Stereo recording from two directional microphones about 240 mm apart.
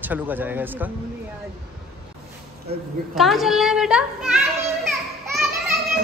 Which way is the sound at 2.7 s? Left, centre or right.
Right.